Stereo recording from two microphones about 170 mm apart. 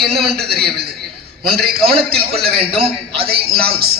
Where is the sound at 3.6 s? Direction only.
65° right (ahead or behind).